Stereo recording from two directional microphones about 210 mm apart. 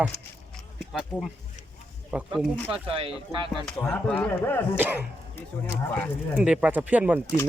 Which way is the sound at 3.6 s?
5° left (ahead or behind).